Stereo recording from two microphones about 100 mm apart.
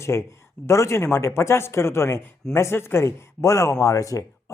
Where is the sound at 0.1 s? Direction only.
25° left (ahead or behind).